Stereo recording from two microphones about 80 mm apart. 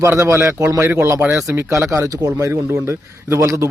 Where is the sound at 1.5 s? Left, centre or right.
Right.